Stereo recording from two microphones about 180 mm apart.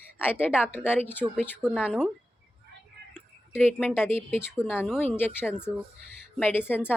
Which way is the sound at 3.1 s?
5° left (ahead or behind).